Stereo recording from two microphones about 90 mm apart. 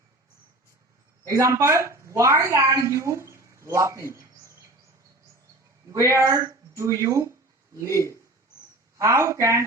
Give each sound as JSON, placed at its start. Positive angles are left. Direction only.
{"t": 1.2, "sound": "a woman's voice", "side_deg": -35}
{"t": 5.9, "sound": "speech", "side_deg": -35}